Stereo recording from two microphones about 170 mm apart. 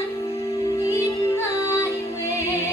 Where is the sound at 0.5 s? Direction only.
20° left (ahead or behind).